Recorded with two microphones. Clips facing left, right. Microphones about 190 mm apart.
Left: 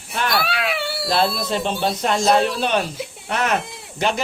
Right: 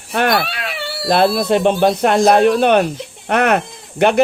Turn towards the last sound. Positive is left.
turn(degrees=-60)  # may be behind; listen again after turning